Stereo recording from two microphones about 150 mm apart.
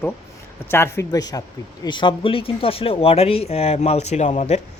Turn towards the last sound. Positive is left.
turn(degrees=50)  # may be behind; listen again after turning